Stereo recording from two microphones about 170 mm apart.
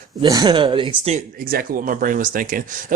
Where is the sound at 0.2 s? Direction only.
25° right (ahead or behind).